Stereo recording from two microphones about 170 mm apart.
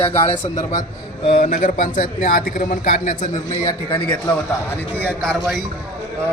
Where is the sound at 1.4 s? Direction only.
50° left (ahead or behind).